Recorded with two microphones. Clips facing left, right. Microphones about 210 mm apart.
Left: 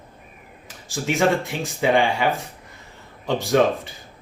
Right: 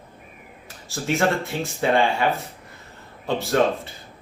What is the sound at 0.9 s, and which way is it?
Speech, 15° left (ahead or behind).